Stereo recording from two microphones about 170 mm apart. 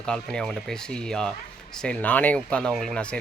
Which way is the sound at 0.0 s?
5° left (ahead or behind).